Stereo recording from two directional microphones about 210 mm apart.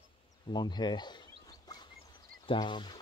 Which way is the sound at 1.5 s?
20° left (ahead or behind).